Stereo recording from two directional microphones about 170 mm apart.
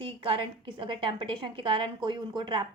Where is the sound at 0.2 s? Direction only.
30° right (ahead or behind).